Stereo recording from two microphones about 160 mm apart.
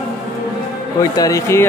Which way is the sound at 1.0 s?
20° left (ahead or behind).